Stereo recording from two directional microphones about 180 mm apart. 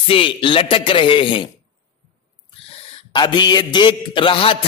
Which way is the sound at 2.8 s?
25° left (ahead or behind).